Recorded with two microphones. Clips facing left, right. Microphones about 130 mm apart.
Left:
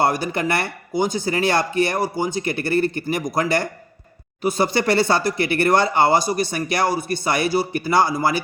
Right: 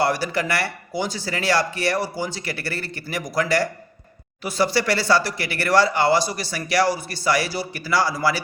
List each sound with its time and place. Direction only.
0.2 s speech: 20° left (ahead or behind)
0.9 s speech: 50° left (ahead or behind)
1.2 s speech: 20° left (ahead or behind)
6.1 s speech: 50° left (ahead or behind)
6.5 s speech: 25° left (ahead or behind)
6.7 s speech: 50° left (ahead or behind)
7.3 s speech: 20° left (ahead or behind)
7.5 s speech: 50° left (ahead or behind)
7.9 s speech: 20° left (ahead or behind)